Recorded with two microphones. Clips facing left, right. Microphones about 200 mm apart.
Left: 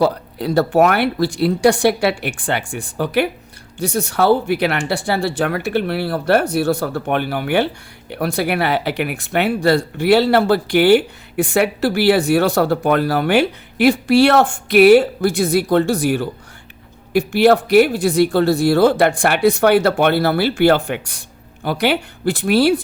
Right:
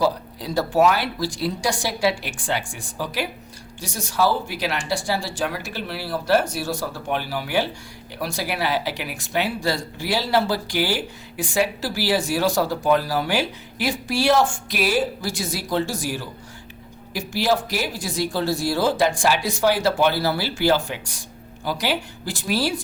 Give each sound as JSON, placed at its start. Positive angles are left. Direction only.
{"t": 0.0, "sound": "speech", "side_deg": 60}